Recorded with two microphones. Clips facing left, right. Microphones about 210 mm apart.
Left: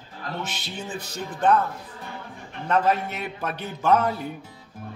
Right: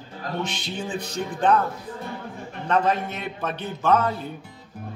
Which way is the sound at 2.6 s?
10° left (ahead or behind).